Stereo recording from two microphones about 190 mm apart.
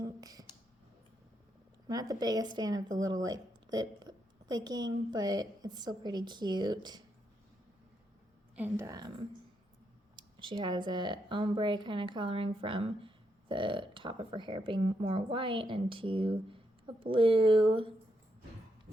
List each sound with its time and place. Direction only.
0.0 s a sound: 20° right (ahead or behind)
1.9 s a woman's voice: 20° right (ahead or behind)
8.5 s a woman's voice: 10° right (ahead or behind)
10.2 s a woman's voice: 25° right (ahead or behind)